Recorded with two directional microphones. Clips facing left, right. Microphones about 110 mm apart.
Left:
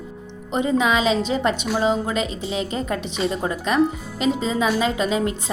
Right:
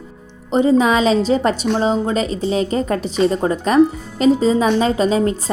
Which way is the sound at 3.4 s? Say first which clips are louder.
Right 5 dB; 40° right (ahead or behind).